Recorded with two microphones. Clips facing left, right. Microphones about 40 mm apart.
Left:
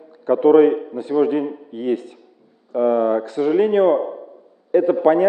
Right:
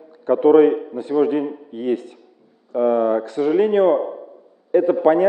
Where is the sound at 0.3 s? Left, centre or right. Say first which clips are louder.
Even; centre.